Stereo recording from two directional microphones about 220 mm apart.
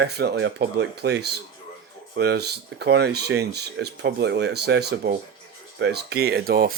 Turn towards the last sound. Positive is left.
turn(degrees=-45)  # may be behind; listen again after turning